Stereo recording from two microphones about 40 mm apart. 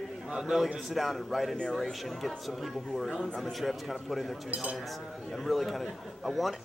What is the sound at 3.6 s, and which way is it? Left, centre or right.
A man's voice, centre.